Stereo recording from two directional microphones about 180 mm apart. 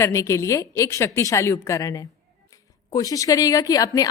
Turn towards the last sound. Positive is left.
turn(degrees=20)  # may be behind; listen again after turning